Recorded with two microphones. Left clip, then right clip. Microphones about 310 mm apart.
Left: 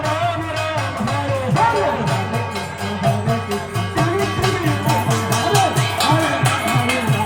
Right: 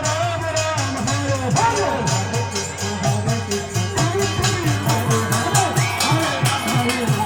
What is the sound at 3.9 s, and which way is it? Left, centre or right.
Music, centre.